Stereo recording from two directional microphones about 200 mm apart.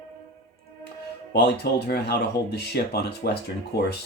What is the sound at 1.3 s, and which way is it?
Speech, 55° left (ahead or behind).